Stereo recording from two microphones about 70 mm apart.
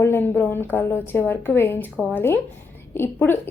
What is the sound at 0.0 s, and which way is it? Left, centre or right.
A woman's voice, left.